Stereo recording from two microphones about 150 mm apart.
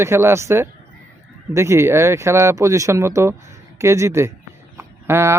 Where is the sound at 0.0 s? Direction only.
15° right (ahead or behind).